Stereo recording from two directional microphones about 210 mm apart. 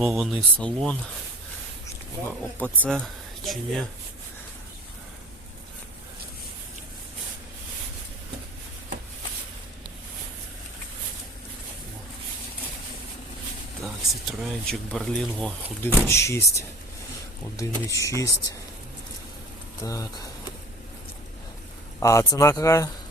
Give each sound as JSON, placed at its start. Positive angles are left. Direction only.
{"t": 0.0, "sound": "speech", "side_deg": 0}
{"t": 2.6, "sound": "speech", "side_deg": 5}
{"t": 13.8, "sound": "speech", "side_deg": 0}
{"t": 19.8, "sound": "speech", "side_deg": 15}
{"t": 22.0, "sound": "speech", "side_deg": 15}